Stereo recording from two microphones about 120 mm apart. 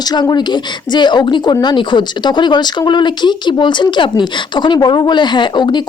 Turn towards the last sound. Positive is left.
turn(degrees=40)  # may be behind; listen again after turning